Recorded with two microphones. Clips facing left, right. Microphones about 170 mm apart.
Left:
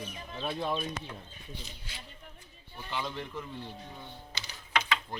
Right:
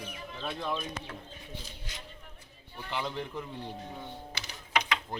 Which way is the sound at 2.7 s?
15° right (ahead or behind).